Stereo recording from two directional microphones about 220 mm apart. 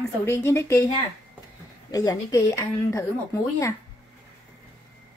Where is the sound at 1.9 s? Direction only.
15° left (ahead or behind).